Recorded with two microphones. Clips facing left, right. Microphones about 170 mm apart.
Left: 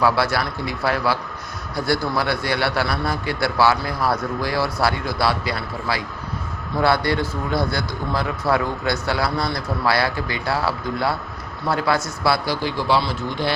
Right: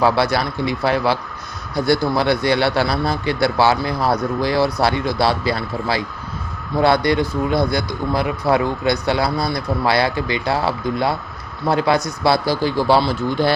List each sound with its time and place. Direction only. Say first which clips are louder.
0.0 s a man's voice: right 3 dB; 20° right (ahead or behind)
12.6 s speech: right 5 dB; 40° right (ahead or behind)